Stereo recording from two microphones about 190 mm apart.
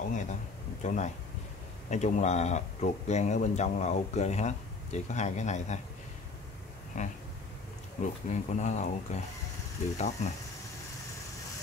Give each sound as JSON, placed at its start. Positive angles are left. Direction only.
{"t": 0.1, "sound": "a sound", "side_deg": 40}
{"t": 0.8, "sound": "speech", "side_deg": 40}
{"t": 6.9, "sound": "speech", "side_deg": 40}